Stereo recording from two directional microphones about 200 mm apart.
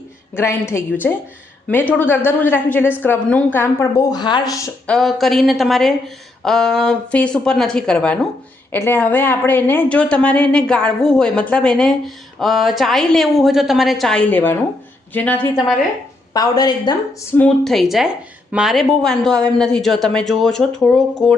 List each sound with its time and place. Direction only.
0.7 s a woman's voice: 10° left (ahead or behind)
4.9 s a woman's voice: centre (ahead or behind)
16.3 s a woman's voice: 20° left (ahead or behind)
17.3 s speech: 5° left (ahead or behind)